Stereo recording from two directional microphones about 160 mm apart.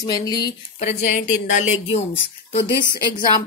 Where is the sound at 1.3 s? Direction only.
50° left (ahead or behind).